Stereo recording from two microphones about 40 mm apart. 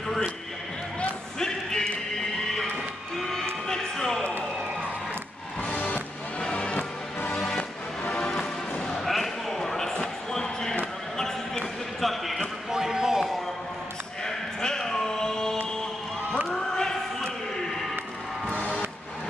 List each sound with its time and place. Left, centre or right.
1.4 s a sound: centre
3.2 s music: centre
6.4 s a sound: left
7.5 s music: left
8.2 s music: centre
8.7 s basketball bounce: centre
9.0 s basketball bounce: centre
12.0 s basketball bounce: centre
12.7 s basketball bounce: centre
14.2 s a sound: centre
16.4 s choir: centre